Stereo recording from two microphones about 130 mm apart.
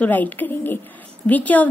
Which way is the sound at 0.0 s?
15° left (ahead or behind).